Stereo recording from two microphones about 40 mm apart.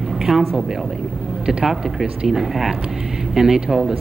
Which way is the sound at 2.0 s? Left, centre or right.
Centre.